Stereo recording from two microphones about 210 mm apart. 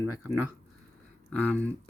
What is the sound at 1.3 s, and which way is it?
Speech, 5° left (ahead or behind).